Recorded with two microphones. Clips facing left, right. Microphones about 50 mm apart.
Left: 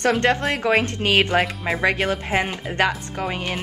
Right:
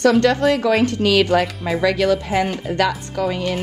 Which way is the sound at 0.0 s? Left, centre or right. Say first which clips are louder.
Right 5 dB; left.